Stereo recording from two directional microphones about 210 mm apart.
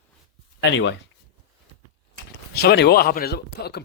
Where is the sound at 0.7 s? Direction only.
60° left (ahead or behind).